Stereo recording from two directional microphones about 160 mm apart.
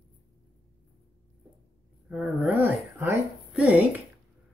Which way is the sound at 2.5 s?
15° right (ahead or behind).